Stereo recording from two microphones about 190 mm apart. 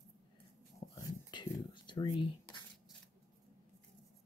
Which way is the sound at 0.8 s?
20° left (ahead or behind).